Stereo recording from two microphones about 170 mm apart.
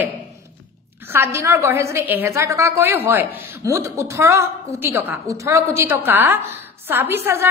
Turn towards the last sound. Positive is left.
turn(degrees=-15)  # may be behind; listen again after turning